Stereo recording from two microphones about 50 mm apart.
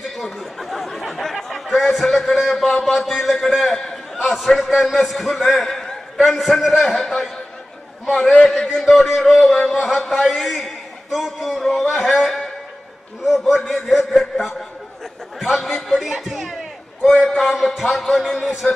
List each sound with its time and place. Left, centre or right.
0.2 s chatter: centre
6.8 s a man's voice: centre
8.5 s a man's voice: centre
9.5 s a man's voice: centre